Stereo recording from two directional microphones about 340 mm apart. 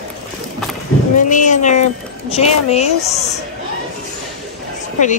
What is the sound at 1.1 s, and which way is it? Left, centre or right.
Speech, left.